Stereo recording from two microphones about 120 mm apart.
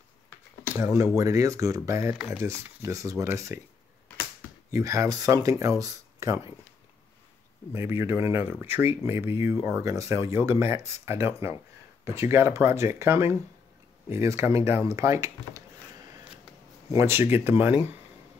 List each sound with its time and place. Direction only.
0.7 s speech: 25° right (ahead or behind)
4.6 s speech: 25° right (ahead or behind)
7.7 s speech: 20° right (ahead or behind)
16.9 s speech: 20° right (ahead or behind)